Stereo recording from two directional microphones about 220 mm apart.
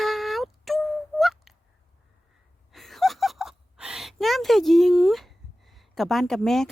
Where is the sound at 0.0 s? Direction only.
Centre (ahead or behind).